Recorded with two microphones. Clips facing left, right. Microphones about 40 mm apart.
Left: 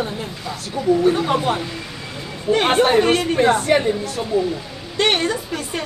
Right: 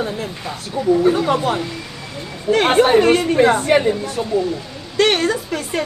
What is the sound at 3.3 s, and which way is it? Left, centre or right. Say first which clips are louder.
Speech: right 2 dB; centre.